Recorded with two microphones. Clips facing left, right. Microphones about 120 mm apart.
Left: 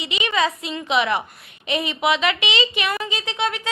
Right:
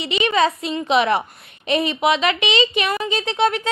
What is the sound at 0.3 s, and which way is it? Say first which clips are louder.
A woman's voice: right 3 dB; 30° right (ahead or behind).